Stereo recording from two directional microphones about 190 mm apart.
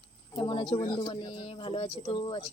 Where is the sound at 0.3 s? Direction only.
25° left (ahead or behind).